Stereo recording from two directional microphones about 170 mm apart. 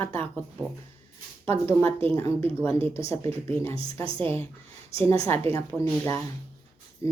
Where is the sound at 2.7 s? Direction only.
35° right (ahead or behind).